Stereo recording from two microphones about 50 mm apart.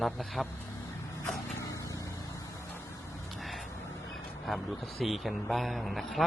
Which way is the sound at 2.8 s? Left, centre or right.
Left.